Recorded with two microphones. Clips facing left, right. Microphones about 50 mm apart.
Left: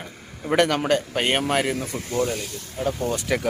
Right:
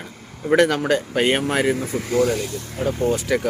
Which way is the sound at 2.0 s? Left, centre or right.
Right.